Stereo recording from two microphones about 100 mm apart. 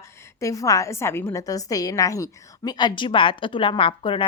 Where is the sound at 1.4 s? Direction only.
35° left (ahead or behind).